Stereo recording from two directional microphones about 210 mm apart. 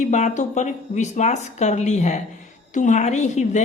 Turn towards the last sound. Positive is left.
turn(degrees=35)  # may be behind; listen again after turning